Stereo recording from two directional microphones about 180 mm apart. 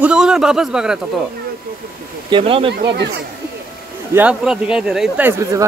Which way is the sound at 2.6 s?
70° right (ahead or behind).